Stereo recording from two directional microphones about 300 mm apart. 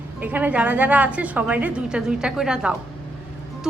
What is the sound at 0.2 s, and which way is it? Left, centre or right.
A woman's voice, centre.